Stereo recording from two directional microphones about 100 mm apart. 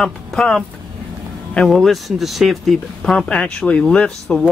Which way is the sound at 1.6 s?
Centre (ahead or behind).